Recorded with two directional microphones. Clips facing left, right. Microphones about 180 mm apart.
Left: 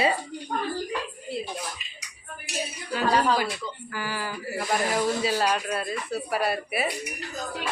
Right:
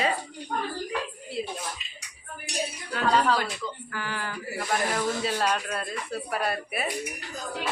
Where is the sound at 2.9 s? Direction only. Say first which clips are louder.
Left 1 dB; 10° left (ahead or behind).